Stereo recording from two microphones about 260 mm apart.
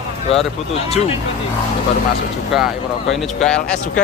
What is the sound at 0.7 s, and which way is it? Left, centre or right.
Speech, left.